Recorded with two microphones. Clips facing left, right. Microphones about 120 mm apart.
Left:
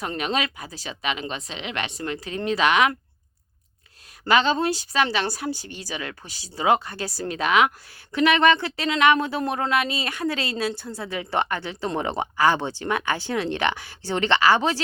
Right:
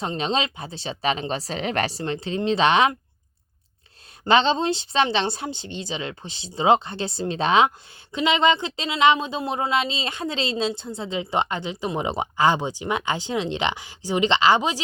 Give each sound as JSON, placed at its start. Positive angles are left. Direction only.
{"t": 0.0, "sound": "speech", "side_deg": -25}
{"t": 4.2, "sound": "speech", "side_deg": -25}